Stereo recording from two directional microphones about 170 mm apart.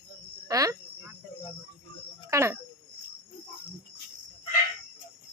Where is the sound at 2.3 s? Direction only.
15° right (ahead or behind).